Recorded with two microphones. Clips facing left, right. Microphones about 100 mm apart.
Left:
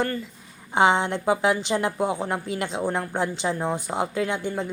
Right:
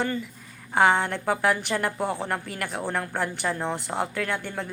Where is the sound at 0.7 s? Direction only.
20° left (ahead or behind).